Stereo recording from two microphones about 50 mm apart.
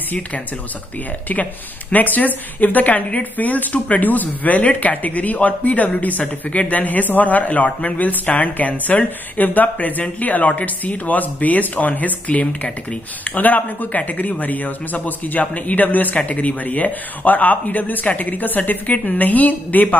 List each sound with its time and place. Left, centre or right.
1.3 s speech: left